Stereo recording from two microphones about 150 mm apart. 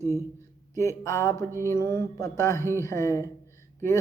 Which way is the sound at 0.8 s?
20° left (ahead or behind).